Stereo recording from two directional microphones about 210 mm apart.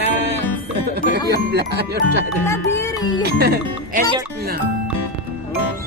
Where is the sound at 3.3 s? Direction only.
45° right (ahead or behind).